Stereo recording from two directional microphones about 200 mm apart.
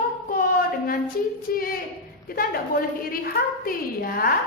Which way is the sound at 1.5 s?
45° left (ahead or behind).